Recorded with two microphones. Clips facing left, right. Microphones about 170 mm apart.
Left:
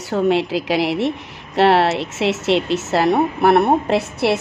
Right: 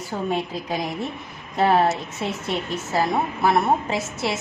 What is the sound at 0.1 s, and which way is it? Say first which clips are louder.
A woman's voice: left 9 dB; 85° left.